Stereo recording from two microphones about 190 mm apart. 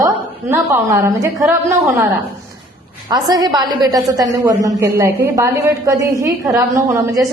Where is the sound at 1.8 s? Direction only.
Centre (ahead or behind).